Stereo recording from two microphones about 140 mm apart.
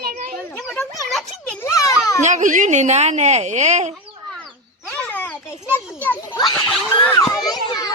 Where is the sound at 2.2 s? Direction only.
60° right (ahead or behind).